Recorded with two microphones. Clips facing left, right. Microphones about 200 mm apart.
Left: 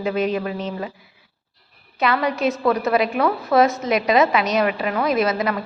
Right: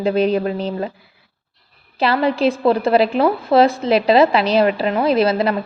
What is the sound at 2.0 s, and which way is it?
A woman's voice, 30° right (ahead or behind).